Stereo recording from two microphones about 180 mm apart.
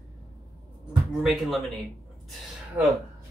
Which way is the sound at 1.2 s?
Centre (ahead or behind).